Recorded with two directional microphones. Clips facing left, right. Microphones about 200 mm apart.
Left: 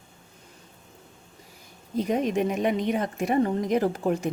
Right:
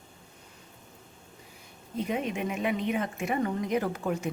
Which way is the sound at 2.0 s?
40° left (ahead or behind).